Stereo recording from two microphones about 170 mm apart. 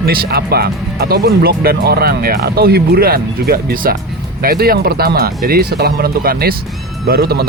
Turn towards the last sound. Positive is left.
turn(degrees=-65)  # may be behind; listen again after turning